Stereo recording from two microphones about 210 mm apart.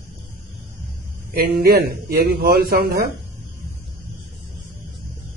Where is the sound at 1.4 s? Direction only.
45° right (ahead or behind).